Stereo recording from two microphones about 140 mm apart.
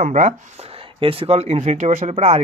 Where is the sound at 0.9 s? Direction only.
40° right (ahead or behind).